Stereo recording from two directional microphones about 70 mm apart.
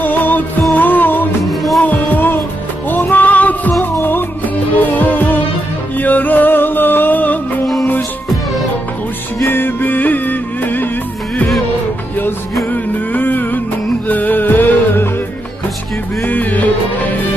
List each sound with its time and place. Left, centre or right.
0.0 s music: left
1.5 s music: centre
1.8 s music: left
3.8 s music: left
9.5 s music: left
12.7 s music: left
16.2 s music: left